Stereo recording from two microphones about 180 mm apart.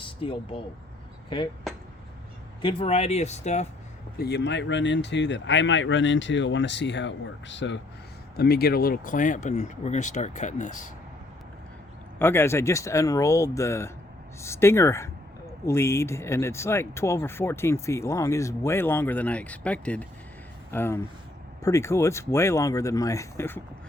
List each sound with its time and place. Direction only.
0.0 s speech: 30° left (ahead or behind)
2.6 s speech: 30° left (ahead or behind)
4.2 s speech: 70° left (ahead or behind); by 7.8 s 90° left
8.4 s speech: 60° left (ahead or behind)
12.2 s speech: 15° left (ahead or behind)